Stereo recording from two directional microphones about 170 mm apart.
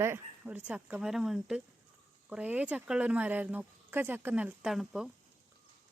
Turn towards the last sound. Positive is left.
turn(degrees=-5)  # may be behind; listen again after turning